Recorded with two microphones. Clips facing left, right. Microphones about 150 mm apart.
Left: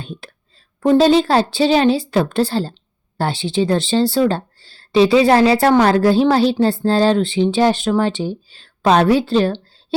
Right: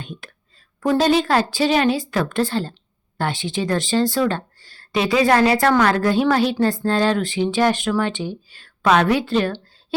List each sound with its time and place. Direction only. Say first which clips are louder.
0.0 s a woman's voice: left 3 dB; 30° left (ahead or behind)